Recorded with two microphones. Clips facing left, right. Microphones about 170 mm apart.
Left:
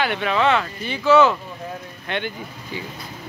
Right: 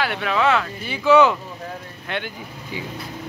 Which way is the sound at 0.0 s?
Centre (ahead or behind).